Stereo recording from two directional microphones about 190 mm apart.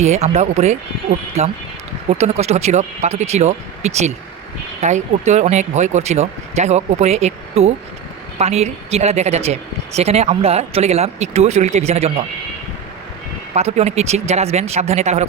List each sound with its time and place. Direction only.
0.0 s speech: 35° right (ahead or behind)
13.5 s speech: 35° right (ahead or behind)